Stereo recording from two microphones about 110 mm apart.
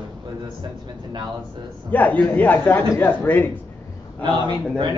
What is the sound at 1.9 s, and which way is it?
A man's voice, 15° left (ahead or behind).